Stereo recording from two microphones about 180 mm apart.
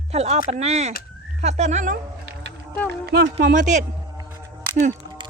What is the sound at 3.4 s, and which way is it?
Speech, 45° right (ahead or behind).